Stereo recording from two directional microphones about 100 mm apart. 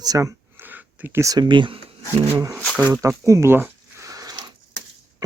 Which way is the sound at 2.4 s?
30° right (ahead or behind).